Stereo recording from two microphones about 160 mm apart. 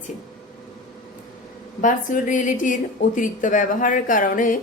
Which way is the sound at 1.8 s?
55° left (ahead or behind).